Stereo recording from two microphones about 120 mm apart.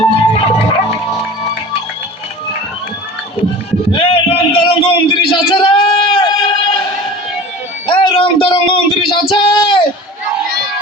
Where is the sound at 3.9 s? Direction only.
50° left (ahead or behind).